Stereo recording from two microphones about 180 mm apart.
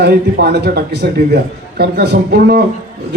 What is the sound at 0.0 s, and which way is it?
A man's voice, 65° right (ahead or behind).